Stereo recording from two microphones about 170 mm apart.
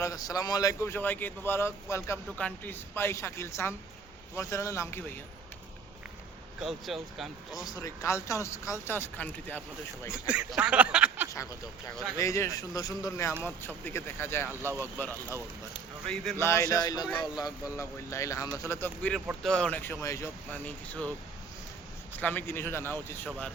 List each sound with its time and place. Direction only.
0.0 s speech: 20° left (ahead or behind)
6.6 s speech: centre (ahead or behind)
7.6 s speech: 20° left (ahead or behind)
10.1 s speech: 5° right (ahead or behind)
11.9 s speech: 15° left (ahead or behind)
16.5 s speech: 20° left (ahead or behind)
22.2 s speech: 10° left (ahead or behind)